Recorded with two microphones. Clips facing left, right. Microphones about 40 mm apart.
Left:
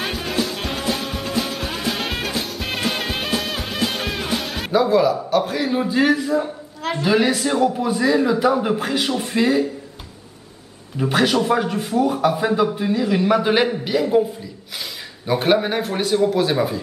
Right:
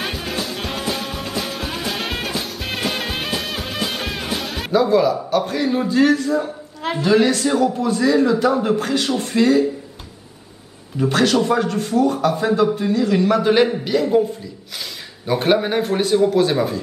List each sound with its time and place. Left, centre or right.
0.0 s music: centre
7.0 s a man's voice: centre
11.0 s a man's voice: centre